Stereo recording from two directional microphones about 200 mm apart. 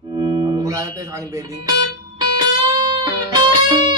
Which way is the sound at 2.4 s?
20° right (ahead or behind).